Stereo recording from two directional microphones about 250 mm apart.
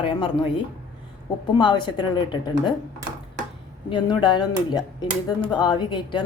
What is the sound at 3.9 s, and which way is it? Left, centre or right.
A woman's voice, centre.